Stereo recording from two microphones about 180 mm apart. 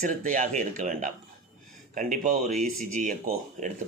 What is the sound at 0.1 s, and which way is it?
Speech, 45° right (ahead or behind).